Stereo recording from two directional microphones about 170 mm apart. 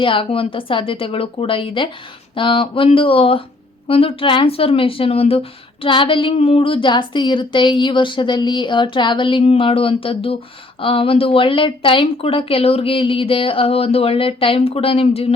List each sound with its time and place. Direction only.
0.0 s speech: 30° left (ahead or behind)